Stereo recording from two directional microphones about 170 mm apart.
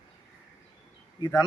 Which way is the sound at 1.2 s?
25° left (ahead or behind).